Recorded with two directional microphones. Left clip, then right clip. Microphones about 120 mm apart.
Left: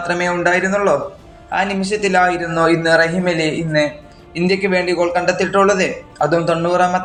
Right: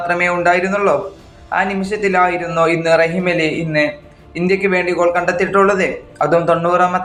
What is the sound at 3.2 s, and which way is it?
Speech, 20° left (ahead or behind).